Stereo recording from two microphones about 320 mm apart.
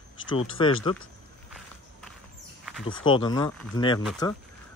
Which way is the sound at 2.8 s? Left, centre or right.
Centre.